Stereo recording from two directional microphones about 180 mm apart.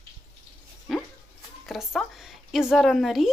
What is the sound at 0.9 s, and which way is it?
Dog, centre (ahead or behind).